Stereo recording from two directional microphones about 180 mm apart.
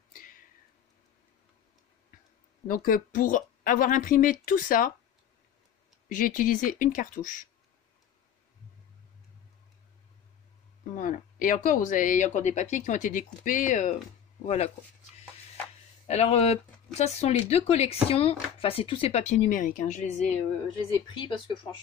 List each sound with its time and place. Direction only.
0.1 s a sound: 50° left (ahead or behind)
2.7 s speech: 50° left (ahead or behind)
6.0 s speech: 50° left (ahead or behind)
11.0 s speech: 50° left (ahead or behind)
16.1 s speech: 35° left (ahead or behind)